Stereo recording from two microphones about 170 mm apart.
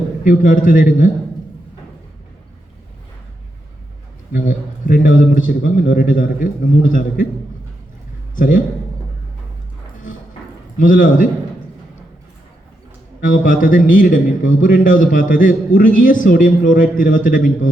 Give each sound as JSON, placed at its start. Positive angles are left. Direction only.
{"t": 0.3, "sound": "speech", "side_deg": 55}
{"t": 4.3, "sound": "speech", "side_deg": 55}
{"t": 8.4, "sound": "speech", "side_deg": 55}
{"t": 10.8, "sound": "speech", "side_deg": 55}
{"t": 13.2, "sound": "speech", "side_deg": 55}